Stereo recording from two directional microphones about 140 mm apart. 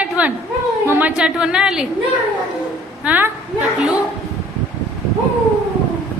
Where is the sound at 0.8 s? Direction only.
15° right (ahead or behind).